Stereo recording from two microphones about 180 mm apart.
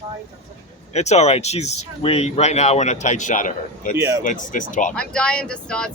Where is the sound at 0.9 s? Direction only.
40° left (ahead or behind).